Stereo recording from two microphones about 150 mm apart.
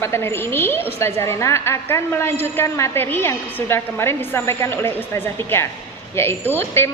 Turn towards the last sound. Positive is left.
turn(degrees=15)  # may be behind; listen again after turning